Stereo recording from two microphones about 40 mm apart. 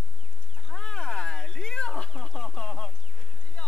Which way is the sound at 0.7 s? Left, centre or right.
Centre.